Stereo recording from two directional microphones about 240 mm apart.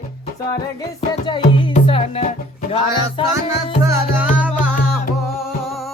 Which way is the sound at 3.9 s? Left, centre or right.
Centre.